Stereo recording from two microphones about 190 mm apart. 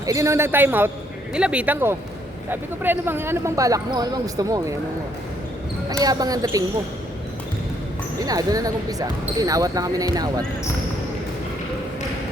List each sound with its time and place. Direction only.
0.0 s speech: 15° right (ahead or behind)
5.9 s speech: 20° right (ahead or behind)
8.2 s speech: 20° right (ahead or behind)